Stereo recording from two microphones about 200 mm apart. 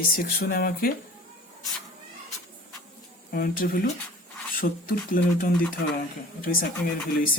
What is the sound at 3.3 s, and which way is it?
Speech, 50° left (ahead or behind).